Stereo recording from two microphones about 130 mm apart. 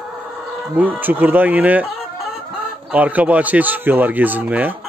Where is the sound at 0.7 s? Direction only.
15° right (ahead or behind).